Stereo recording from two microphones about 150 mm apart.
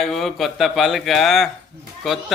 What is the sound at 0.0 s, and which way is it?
A man's voice, centre (ahead or behind).